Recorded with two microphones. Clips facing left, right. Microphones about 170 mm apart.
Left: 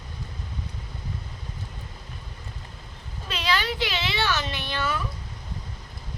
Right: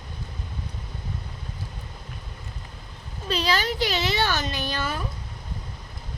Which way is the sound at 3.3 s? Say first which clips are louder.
Right 2 dB; 35° right (ahead or behind).